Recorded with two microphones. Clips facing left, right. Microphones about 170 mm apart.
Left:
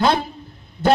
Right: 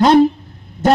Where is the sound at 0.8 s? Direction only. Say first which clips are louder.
Right 3 dB; 45° right (ahead or behind).